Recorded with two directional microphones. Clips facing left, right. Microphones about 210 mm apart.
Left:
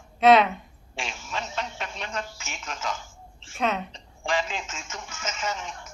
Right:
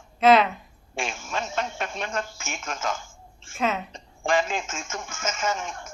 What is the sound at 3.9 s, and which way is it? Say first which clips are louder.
Speech: right 4 dB; 50° right (ahead or behind).